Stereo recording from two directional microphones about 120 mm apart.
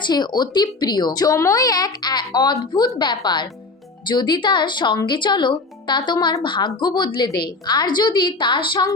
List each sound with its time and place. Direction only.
0.0 s a woman's voice: 35° left (ahead or behind)